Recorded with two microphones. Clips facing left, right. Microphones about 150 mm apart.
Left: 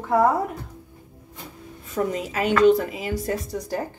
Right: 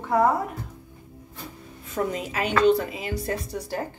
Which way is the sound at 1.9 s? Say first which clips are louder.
Left 2 dB; 45° left (ahead or behind).